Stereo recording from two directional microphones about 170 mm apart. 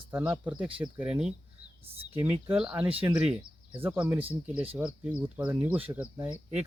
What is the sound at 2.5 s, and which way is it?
Speech, 5° right (ahead or behind).